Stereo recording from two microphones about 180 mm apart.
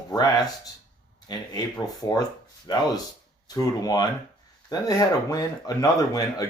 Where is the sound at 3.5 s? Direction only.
20° left (ahead or behind).